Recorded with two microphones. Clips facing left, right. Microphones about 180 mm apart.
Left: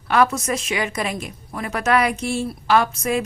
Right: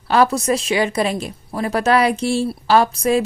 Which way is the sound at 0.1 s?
30° right (ahead or behind).